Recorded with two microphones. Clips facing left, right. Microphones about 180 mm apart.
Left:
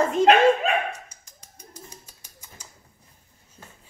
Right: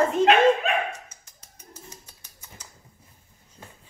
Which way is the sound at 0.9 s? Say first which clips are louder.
Left 2 dB; 10° left (ahead or behind).